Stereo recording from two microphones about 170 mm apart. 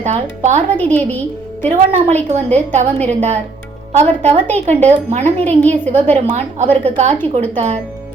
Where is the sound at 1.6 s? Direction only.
40° right (ahead or behind).